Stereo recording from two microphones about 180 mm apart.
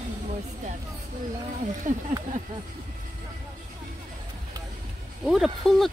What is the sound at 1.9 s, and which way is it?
Speech, 45° right (ahead or behind).